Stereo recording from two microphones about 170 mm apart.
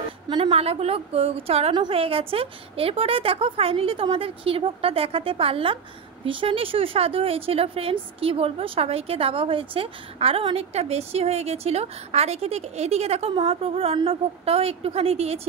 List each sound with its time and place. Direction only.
0.3 s speech: 30° right (ahead or behind)